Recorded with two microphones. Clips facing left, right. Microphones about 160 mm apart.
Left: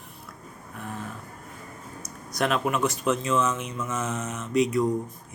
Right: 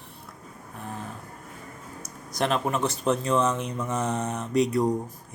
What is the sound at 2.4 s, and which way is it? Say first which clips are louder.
Speech: left 1 dB; 30° right (ahead or behind).